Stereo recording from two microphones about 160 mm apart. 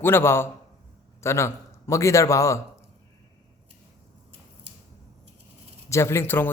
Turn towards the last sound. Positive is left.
turn(degrees=15)  # may be behind; listen again after turning